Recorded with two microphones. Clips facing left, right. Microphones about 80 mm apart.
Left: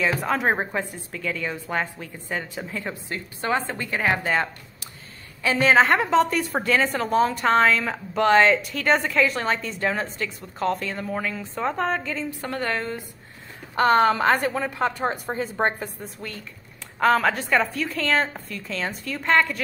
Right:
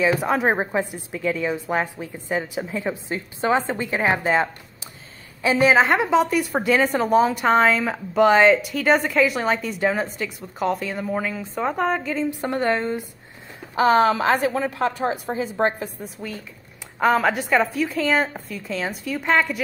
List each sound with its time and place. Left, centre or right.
0.0 s a woman's voice: centre
5.7 s a woman's voice: centre; by 13.0 s right
13.7 s a woman's voice: centre